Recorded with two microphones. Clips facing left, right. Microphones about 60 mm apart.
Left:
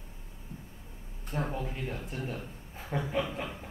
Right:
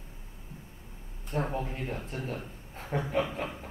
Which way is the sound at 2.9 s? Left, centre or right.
Right.